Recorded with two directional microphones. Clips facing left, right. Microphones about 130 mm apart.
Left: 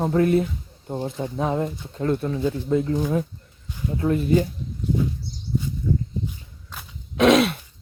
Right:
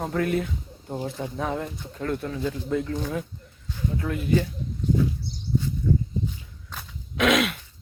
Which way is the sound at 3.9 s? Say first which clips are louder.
Left 5 dB; 30° left (ahead or behind).